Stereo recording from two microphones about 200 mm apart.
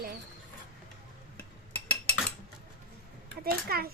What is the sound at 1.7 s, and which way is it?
Cutlery, 5° left (ahead or behind).